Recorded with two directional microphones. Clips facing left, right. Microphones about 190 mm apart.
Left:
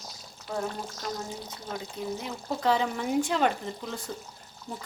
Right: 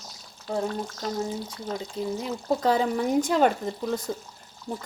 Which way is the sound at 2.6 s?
40° right (ahead or behind).